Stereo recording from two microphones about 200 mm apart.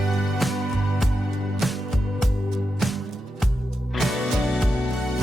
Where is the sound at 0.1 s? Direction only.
Centre (ahead or behind).